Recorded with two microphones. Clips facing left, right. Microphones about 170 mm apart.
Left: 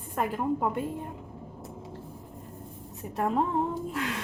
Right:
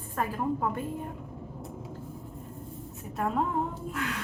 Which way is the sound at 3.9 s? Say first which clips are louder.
Left 2 dB; 30° left (ahead or behind).